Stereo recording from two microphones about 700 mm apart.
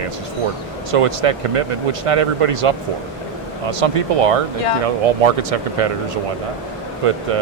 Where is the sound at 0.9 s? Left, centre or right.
Right.